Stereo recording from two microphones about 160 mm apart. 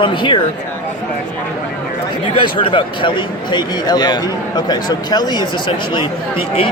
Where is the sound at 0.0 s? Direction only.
30° left (ahead or behind).